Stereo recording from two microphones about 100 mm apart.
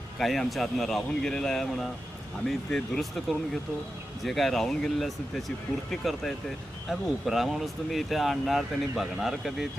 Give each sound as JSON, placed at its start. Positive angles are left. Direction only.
{"t": 0.2, "sound": "speech", "side_deg": 0}